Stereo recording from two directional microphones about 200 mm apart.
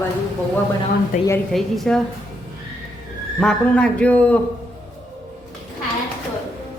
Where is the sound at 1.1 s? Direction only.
40° left (ahead or behind).